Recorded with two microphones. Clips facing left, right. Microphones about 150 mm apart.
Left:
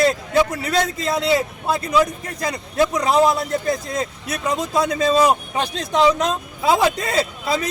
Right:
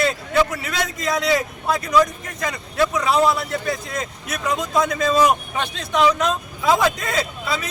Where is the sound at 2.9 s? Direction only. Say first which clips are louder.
Left 2 dB; 40° left (ahead or behind).